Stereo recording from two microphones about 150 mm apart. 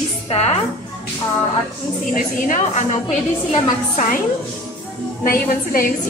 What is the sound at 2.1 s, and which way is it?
Speech, 60° left (ahead or behind).